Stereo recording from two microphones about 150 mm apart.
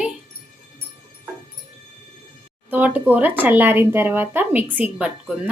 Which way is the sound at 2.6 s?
10° right (ahead or behind).